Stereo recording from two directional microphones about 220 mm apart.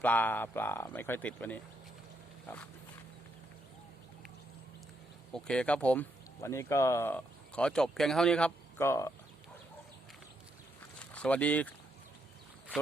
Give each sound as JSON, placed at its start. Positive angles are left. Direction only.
{"t": 0.0, "sound": "speech", "side_deg": 10}
{"t": 5.3, "sound": "speech", "side_deg": 5}
{"t": 11.0, "sound": "speech", "side_deg": 5}